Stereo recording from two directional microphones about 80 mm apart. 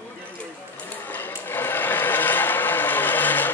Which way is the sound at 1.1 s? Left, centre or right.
Left.